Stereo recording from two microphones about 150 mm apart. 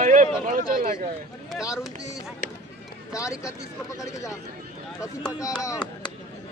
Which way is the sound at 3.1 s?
20° left (ahead or behind).